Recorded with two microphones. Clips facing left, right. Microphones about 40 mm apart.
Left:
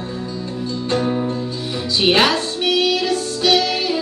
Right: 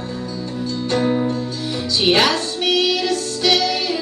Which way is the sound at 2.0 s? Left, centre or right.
Centre.